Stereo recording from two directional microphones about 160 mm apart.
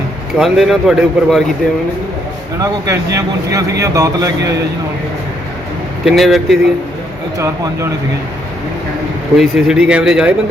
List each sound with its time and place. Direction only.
0.3 s speech: 5° right (ahead or behind)
2.6 s speech: 20° right (ahead or behind)
6.1 s speech: centre (ahead or behind)
7.3 s speech: 20° right (ahead or behind)
9.4 s speech: 5° right (ahead or behind)